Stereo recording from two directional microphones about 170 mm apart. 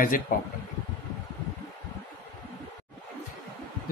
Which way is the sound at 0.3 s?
55° left (ahead or behind).